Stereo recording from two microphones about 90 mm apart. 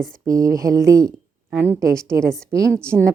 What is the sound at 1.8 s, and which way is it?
Speech, 35° right (ahead or behind).